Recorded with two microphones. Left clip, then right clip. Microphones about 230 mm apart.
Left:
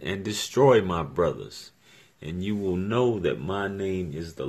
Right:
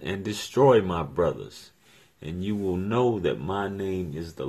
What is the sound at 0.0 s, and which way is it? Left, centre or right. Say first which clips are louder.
Speech: left 1 dB; centre.